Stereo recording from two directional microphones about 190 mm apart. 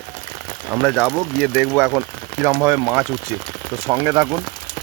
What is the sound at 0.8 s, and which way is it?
Speech, 5° right (ahead or behind).